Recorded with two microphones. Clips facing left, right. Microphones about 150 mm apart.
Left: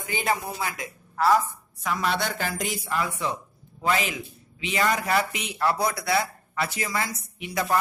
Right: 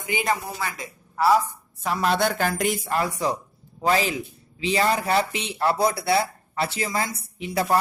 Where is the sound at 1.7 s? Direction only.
35° right (ahead or behind).